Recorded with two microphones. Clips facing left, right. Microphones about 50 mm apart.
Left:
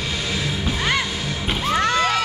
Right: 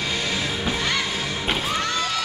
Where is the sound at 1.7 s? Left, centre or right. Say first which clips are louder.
Left 6 dB; left.